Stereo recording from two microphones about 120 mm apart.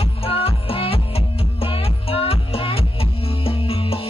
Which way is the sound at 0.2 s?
55° left (ahead or behind).